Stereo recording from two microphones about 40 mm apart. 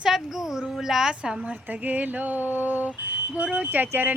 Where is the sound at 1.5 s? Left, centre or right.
Right.